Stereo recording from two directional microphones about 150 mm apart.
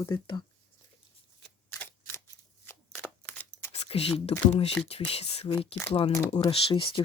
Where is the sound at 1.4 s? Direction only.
10° left (ahead or behind).